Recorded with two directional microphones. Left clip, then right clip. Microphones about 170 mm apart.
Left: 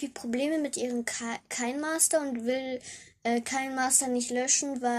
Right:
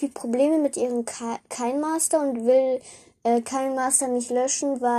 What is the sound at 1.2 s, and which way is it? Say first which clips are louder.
Speech: right 5 dB; 10° left (ahead or behind).